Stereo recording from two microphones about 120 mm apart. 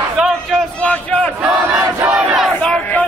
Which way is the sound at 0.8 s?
10° left (ahead or behind).